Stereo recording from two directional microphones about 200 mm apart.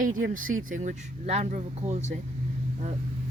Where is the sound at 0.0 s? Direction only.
40° right (ahead or behind).